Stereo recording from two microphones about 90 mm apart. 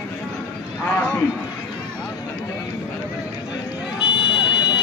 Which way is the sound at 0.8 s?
25° left (ahead or behind).